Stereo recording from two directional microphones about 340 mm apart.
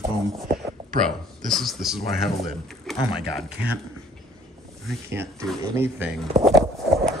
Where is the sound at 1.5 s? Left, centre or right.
Centre.